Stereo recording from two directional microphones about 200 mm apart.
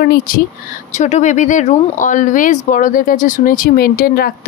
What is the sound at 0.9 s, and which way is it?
Speech, 35° left (ahead or behind).